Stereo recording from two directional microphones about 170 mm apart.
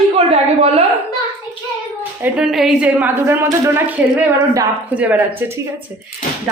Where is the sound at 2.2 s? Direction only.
5° right (ahead or behind).